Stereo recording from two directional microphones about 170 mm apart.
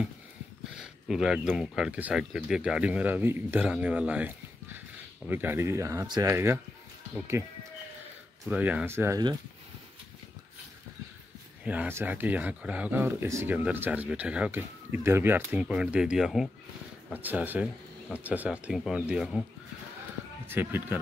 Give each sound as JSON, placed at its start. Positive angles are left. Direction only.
{"t": 0.7, "sound": "speech", "side_deg": -5}
{"t": 8.5, "sound": "speech", "side_deg": -10}
{"t": 11.6, "sound": "speech", "side_deg": -10}
{"t": 20.4, "sound": "speech", "side_deg": -10}